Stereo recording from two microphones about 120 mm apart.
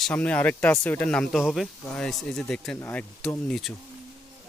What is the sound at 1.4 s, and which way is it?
Speech, centre (ahead or behind).